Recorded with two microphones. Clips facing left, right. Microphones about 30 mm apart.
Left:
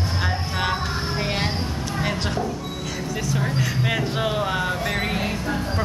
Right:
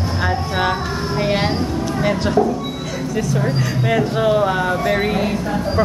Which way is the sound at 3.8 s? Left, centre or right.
Centre.